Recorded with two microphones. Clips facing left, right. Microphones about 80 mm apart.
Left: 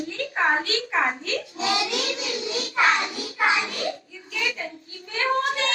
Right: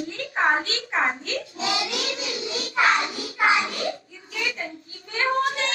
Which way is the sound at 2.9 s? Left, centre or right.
Right.